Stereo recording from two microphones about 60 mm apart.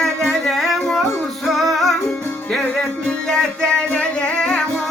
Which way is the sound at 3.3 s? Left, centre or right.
Centre.